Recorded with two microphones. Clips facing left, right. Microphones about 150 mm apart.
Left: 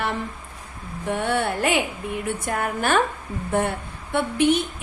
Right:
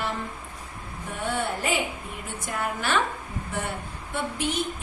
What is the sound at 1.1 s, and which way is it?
Speech, 70° left (ahead or behind).